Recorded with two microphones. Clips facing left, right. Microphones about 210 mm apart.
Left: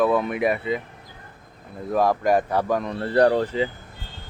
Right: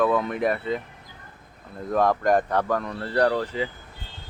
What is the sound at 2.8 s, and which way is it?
Speech, 25° left (ahead or behind).